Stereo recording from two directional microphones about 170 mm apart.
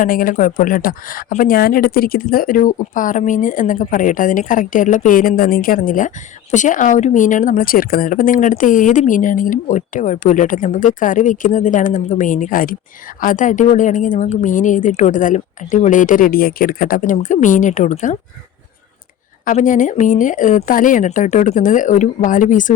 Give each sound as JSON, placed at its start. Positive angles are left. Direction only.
{"t": 0.0, "sound": "speech", "side_deg": 55}
{"t": 19.5, "sound": "speech", "side_deg": 50}